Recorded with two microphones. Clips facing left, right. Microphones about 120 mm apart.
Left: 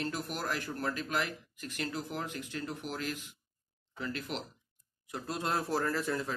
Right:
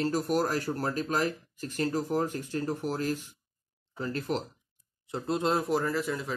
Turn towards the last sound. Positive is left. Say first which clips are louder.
# right 2 dB
turn(degrees=-15)  # may be behind; listen again after turning